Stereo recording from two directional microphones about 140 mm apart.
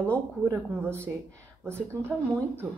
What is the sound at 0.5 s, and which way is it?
A woman's voice, 15° right (ahead or behind).